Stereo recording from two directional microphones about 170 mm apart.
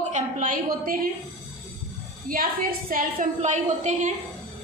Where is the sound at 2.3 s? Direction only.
55° right (ahead or behind).